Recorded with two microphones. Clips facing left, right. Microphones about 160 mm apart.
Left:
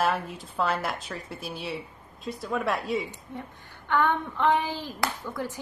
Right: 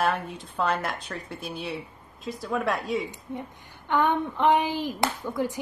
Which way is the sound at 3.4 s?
15° right (ahead or behind).